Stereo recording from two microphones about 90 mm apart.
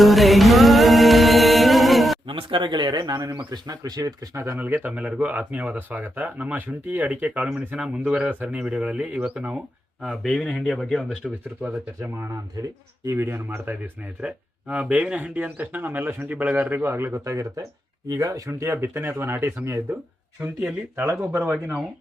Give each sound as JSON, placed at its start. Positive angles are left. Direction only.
{"t": 0.0, "sound": "music", "side_deg": 0}
{"t": 2.2, "sound": "speech", "side_deg": -70}
{"t": 4.5, "sound": "speech", "side_deg": -20}
{"t": 10.0, "sound": "speech", "side_deg": 0}
{"t": 12.1, "sound": "speech", "side_deg": -30}
{"t": 17.3, "sound": "speech", "side_deg": -35}
{"t": 20.4, "sound": "speech", "side_deg": -20}